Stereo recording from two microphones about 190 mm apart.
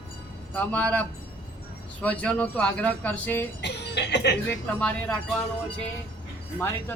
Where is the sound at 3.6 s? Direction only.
65° left (ahead or behind).